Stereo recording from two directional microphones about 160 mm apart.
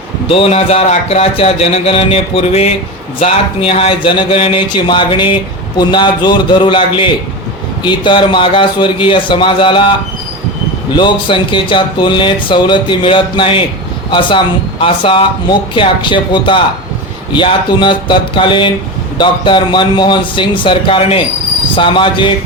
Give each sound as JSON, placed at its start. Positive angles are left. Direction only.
{"t": 0.3, "sound": "speech", "side_deg": 35}
{"t": 10.9, "sound": "speech", "side_deg": 30}